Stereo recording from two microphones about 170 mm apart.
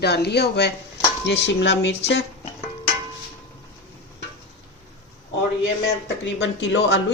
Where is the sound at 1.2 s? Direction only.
90° left.